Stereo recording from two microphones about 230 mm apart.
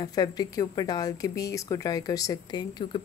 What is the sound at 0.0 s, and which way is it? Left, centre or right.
Speech, centre.